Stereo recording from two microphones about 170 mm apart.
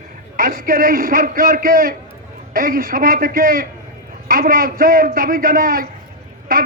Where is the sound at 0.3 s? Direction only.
55° right (ahead or behind).